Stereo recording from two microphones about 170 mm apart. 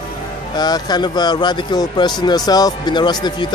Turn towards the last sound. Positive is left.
turn(degrees=25)  # may be behind; listen again after turning